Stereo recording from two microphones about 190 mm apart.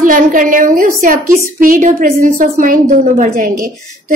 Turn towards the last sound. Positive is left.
turn(degrees=-45)  # may be behind; listen again after turning